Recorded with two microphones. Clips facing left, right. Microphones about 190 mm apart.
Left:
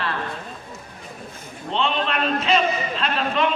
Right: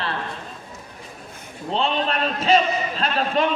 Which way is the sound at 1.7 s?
40° right (ahead or behind).